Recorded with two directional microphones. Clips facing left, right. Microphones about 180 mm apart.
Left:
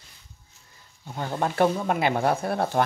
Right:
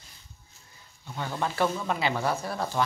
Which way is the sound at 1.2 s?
45° left (ahead or behind).